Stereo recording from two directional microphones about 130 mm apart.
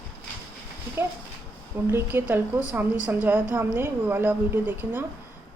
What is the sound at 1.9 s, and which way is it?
Speech, 15° right (ahead or behind).